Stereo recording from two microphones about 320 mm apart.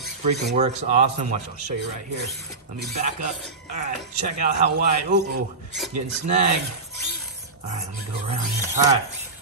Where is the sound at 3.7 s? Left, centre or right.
Right.